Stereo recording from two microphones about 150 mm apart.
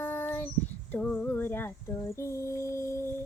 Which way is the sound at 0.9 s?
10° left (ahead or behind).